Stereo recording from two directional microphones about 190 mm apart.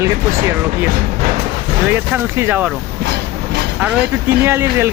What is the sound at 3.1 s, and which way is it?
Train, 60° right (ahead or behind).